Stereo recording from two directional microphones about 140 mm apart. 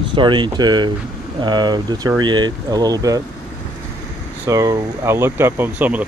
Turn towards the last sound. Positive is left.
turn(degrees=-15)  # may be behind; listen again after turning